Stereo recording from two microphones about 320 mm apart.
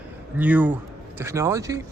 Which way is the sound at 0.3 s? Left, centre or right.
Centre.